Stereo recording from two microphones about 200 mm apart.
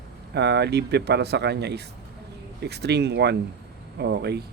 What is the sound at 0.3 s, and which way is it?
Speech, 55° right (ahead or behind).